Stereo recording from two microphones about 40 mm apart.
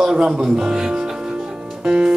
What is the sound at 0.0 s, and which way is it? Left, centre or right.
Speech, centre.